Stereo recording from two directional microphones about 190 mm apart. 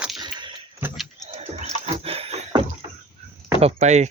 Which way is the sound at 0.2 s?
25° right (ahead or behind).